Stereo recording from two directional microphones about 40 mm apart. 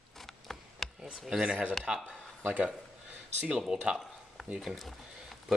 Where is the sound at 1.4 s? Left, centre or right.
Right.